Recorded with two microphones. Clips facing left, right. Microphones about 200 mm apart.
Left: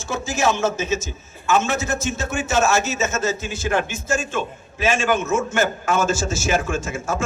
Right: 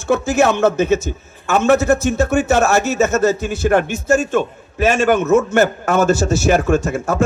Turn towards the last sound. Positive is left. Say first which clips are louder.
# right 8 dB
turn(degrees=-60)  # may be behind; listen again after turning